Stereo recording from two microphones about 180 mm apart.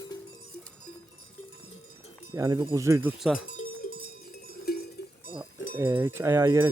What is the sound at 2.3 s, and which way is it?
Speech, 15° right (ahead or behind).